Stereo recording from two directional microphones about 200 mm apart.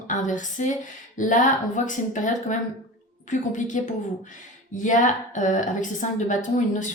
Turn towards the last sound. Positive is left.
turn(degrees=40)  # may be behind; listen again after turning